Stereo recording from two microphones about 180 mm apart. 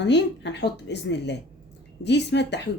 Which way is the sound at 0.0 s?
75° left (ahead or behind).